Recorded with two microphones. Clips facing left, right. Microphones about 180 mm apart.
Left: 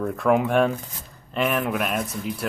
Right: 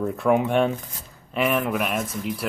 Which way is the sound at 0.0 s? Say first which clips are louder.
Even; 5° right (ahead or behind).